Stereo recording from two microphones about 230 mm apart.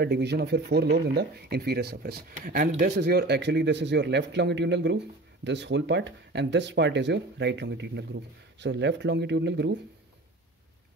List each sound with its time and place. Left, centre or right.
0.0 s a man's voice: right
3.0 s a man's voice: right